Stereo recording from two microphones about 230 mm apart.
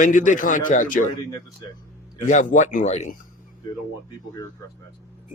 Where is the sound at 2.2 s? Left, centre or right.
Left.